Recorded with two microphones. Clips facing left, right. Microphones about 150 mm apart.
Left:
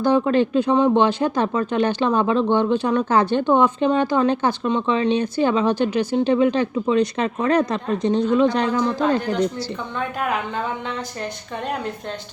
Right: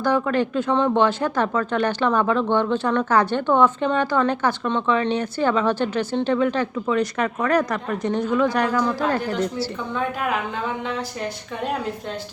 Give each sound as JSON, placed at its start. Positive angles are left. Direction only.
{"t": 0.0, "sound": "speech", "side_deg": 20}
{"t": 9.9, "sound": "a woman's voice", "side_deg": 0}